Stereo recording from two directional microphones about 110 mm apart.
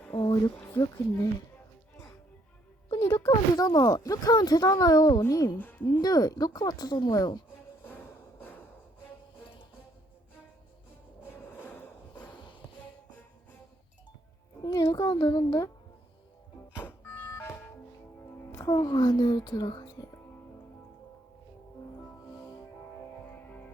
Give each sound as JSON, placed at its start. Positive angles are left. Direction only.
{"t": 0.3, "sound": "speech", "side_deg": 40}
{"t": 0.5, "sound": "speech", "side_deg": 20}
{"t": 2.9, "sound": "speech", "side_deg": 25}
{"t": 5.5, "sound": "a woman's voice", "side_deg": 15}
{"t": 5.8, "sound": "speech", "side_deg": 40}
{"t": 7.9, "sound": "a sound", "side_deg": 15}
{"t": 11.3, "sound": "a sound", "side_deg": 15}
{"t": 14.6, "sound": "speech", "side_deg": 35}
{"t": 16.8, "sound": "a sound", "side_deg": 20}
{"t": 18.5, "sound": "speech", "side_deg": 30}
{"t": 23.2, "sound": "music", "side_deg": 15}